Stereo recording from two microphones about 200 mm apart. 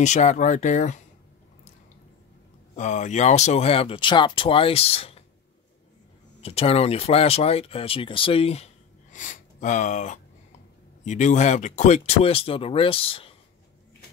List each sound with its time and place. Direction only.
0.0 s speech: 35° left (ahead or behind)
2.7 s speech: 35° left (ahead or behind)
6.4 s speech: 30° left (ahead or behind)